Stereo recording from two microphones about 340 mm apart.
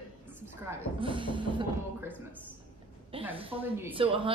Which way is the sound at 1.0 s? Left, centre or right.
Centre.